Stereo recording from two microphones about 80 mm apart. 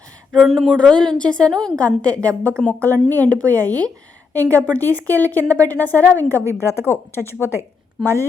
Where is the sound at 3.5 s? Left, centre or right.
Right.